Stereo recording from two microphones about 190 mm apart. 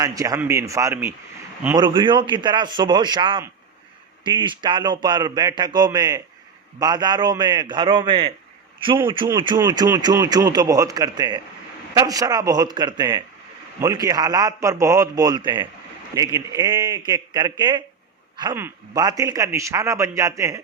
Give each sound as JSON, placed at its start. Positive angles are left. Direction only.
{"t": 0.0, "sound": "a man's voice", "side_deg": -20}